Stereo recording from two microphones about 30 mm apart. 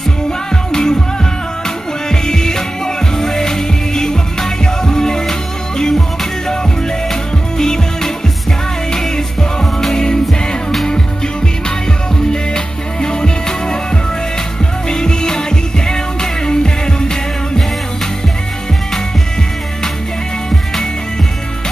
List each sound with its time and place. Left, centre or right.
0.7 s music: left
2.0 s music: left
7.5 s music: centre
12.3 s music: left
14.9 s music: left